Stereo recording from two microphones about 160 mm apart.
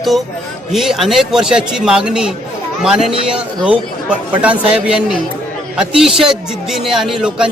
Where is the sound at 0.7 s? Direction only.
Centre (ahead or behind).